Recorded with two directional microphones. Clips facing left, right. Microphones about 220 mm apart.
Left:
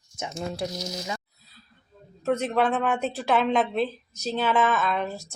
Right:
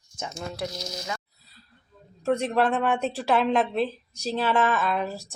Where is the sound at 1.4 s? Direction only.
Centre (ahead or behind).